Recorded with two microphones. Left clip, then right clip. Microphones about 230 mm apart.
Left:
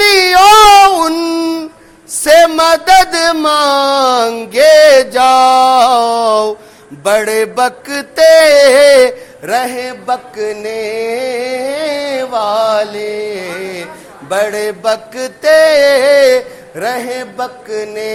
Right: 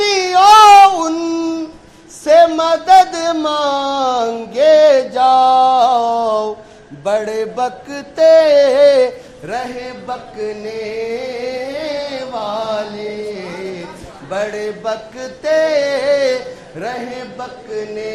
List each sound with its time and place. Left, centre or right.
0.0 s baby cry: left
0.9 s a sound: left
7.0 s mantra: left
14.3 s chant: left